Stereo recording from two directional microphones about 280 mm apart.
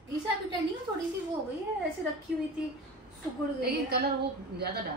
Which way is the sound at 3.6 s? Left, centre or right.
Right.